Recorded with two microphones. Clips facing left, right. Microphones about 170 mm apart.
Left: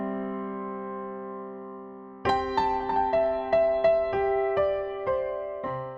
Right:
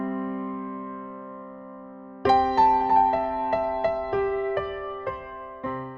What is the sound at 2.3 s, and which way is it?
Music, 70° right (ahead or behind).